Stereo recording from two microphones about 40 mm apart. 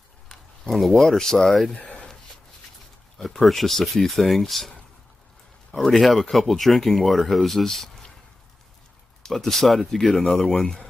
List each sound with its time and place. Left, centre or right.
0.3 s speech: centre
1.9 s a sound: left
3.2 s speech: centre
9.3 s speech: centre